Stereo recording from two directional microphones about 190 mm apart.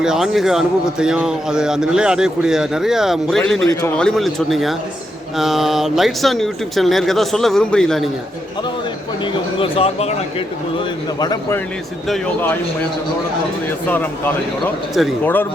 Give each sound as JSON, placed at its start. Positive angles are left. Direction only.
{"t": 0.0, "sound": "a man's voice", "side_deg": 0}
{"t": 9.2, "sound": "speech", "side_deg": 30}
{"t": 11.2, "sound": "a man's voice", "side_deg": 20}
{"t": 15.2, "sound": "speech", "side_deg": 10}